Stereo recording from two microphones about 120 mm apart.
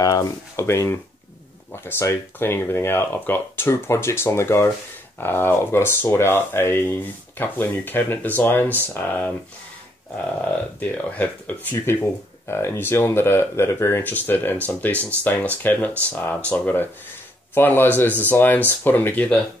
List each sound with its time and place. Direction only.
0.0 s speech: 25° left (ahead or behind)
10.4 s speech: 10° left (ahead or behind)